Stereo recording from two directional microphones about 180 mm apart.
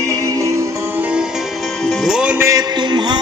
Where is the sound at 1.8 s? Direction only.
Centre (ahead or behind).